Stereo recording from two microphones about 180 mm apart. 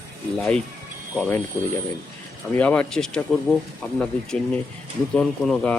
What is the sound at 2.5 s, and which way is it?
Speech, 5° left (ahead or behind).